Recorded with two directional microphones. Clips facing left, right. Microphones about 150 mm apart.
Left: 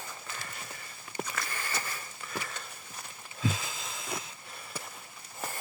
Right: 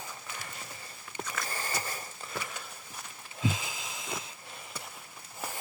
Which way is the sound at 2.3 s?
10° right (ahead or behind).